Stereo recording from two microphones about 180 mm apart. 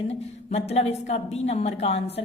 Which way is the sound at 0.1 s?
35° left (ahead or behind).